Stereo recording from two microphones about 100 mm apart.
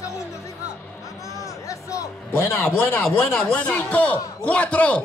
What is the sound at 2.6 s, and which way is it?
A man's voice, 20° left (ahead or behind).